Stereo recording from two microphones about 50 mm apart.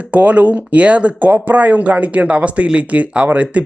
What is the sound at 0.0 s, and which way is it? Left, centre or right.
Speech, right.